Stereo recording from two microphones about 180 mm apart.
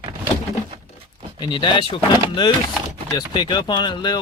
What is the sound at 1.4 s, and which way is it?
Speech, 25° left (ahead or behind).